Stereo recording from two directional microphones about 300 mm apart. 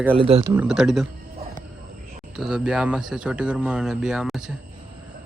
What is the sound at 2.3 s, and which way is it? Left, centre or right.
Speech, centre.